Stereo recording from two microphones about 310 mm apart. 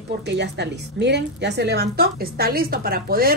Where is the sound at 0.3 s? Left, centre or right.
Right.